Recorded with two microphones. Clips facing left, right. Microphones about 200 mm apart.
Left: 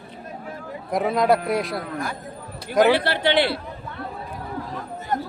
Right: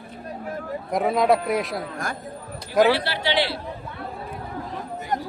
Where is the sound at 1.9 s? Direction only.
45° right (ahead or behind).